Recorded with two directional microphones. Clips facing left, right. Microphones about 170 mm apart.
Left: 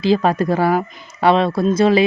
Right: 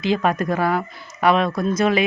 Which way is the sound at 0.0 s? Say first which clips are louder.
Left 4 dB; 30° left (ahead or behind).